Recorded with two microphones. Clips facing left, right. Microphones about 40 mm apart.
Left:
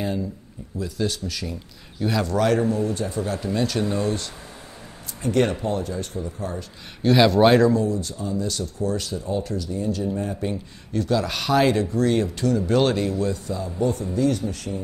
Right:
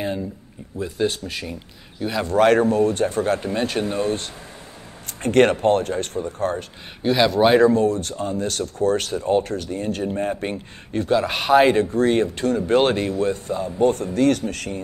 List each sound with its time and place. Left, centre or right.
0.7 s speech: right
2.0 s a man's voice: centre
2.2 s speech: right
3.4 s speech: right
5.2 s speech: right
7.0 s speech: centre
7.6 s speech: right